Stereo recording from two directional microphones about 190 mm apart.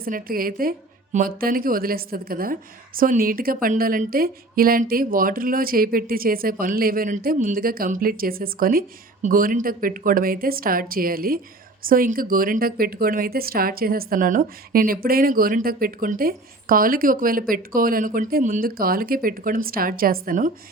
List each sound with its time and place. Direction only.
0.0 s a woman's voice: 50° right (ahead or behind)